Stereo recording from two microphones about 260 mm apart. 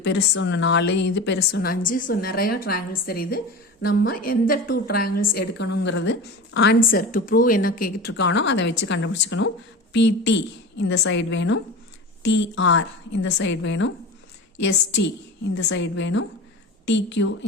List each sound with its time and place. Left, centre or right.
0.0 s a woman's voice: left